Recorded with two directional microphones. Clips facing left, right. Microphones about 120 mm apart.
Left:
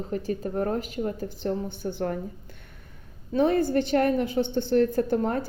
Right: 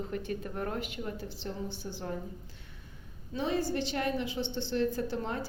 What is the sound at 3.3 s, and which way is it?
A woman's voice, 55° left (ahead or behind).